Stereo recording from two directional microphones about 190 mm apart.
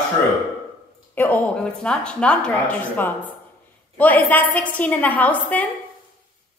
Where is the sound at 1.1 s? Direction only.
10° left (ahead or behind).